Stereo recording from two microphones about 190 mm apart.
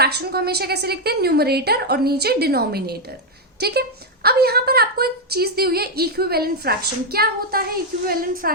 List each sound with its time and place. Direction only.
0.0 s a woman's voice: 55° right (ahead or behind)